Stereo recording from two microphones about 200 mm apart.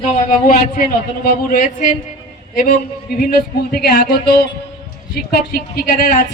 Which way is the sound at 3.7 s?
50° left (ahead or behind).